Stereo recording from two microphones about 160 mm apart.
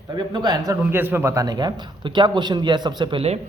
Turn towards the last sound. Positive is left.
turn(degrees=-35)  # may be behind; listen again after turning